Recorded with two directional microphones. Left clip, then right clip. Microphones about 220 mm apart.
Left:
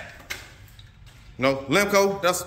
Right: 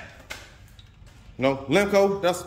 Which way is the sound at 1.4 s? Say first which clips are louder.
Left 1 dB; 10° right (ahead or behind).